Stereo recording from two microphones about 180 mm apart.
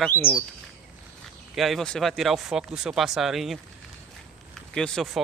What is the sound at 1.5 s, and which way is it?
A man's voice, centre (ahead or behind).